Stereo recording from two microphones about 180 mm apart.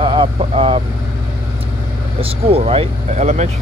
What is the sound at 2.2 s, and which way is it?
Speech, 30° right (ahead or behind).